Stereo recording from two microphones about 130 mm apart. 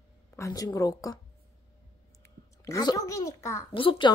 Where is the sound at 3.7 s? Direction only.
40° left (ahead or behind).